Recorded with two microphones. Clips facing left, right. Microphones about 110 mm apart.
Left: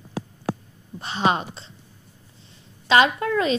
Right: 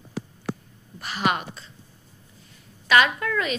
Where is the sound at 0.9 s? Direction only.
25° left (ahead or behind).